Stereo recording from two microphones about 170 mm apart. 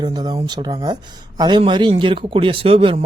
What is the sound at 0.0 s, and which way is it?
Speech, 25° right (ahead or behind).